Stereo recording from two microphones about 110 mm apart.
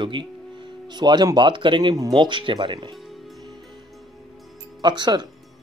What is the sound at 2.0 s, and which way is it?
Speech, 35° right (ahead or behind).